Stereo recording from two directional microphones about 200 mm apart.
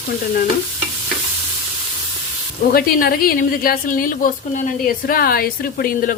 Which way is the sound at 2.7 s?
45° left (ahead or behind).